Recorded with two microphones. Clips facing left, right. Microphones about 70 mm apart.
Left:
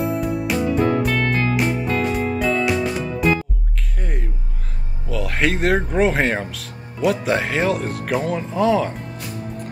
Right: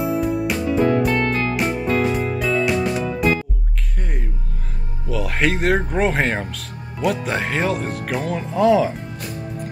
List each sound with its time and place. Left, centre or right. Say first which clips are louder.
0.0 s music: right 2 dB; centre
5.1 s speech: even; centre